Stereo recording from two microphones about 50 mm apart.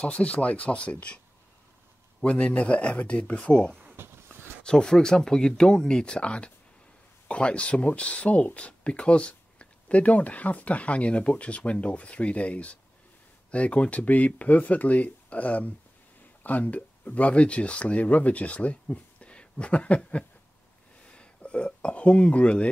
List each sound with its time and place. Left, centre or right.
0.0 s speech: left
2.2 s speech: left
3.9 s a sound: right
4.6 s speech: centre